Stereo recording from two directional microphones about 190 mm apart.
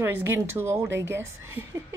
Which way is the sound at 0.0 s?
10° right (ahead or behind).